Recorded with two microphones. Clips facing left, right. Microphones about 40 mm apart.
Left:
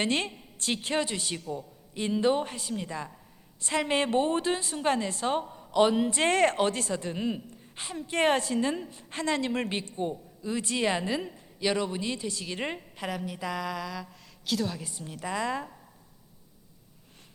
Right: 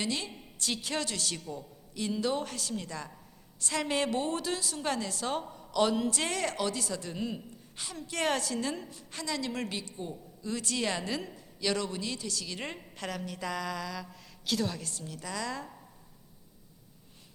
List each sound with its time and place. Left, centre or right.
0.0 s speech: left
6.2 s a woman's voice: left
10.4 s speech: left; by 14.8 s centre
14.8 s speech: centre